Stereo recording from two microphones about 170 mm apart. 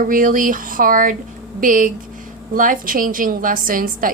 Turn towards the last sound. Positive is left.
turn(degrees=-55)  # may be behind; listen again after turning